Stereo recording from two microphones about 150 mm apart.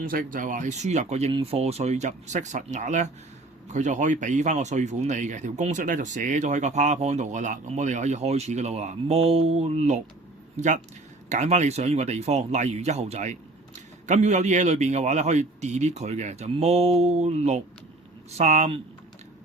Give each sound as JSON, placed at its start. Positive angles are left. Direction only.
{"t": 0.0, "sound": "speech", "side_deg": -65}
{"t": 11.3, "sound": "speech", "side_deg": -50}